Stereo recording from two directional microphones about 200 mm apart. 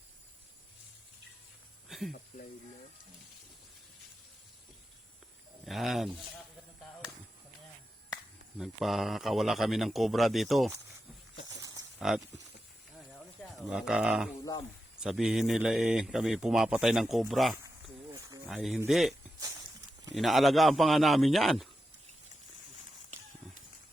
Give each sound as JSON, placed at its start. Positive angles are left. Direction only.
{"t": 1.9, "sound": "a sound", "side_deg": 0}
{"t": 5.6, "sound": "speech", "side_deg": 0}
{"t": 8.5, "sound": "speech", "side_deg": 0}
{"t": 11.6, "sound": "a sound", "side_deg": -15}
{"t": 11.9, "sound": "speech", "side_deg": -5}
{"t": 13.7, "sound": "speech", "side_deg": -5}
{"t": 18.1, "sound": "snake", "side_deg": -20}
{"t": 18.4, "sound": "speech", "side_deg": 0}
{"t": 20.1, "sound": "speech", "side_deg": 0}